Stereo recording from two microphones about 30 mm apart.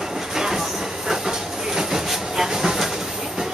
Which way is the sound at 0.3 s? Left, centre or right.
Centre.